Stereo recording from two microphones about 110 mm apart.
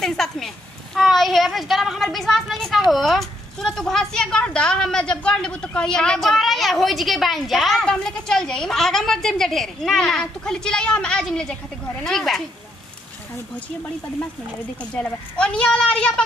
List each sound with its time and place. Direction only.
0.0 s a sound: 5° left (ahead or behind)
0.9 s a woman's voice: centre (ahead or behind)
15.0 s a woman's voice: 10° left (ahead or behind)